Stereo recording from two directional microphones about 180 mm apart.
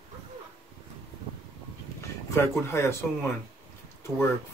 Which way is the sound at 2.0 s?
15° left (ahead or behind).